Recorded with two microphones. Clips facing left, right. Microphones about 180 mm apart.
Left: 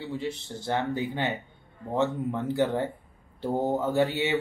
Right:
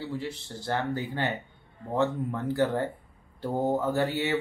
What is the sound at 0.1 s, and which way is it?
Speech, 20° left (ahead or behind).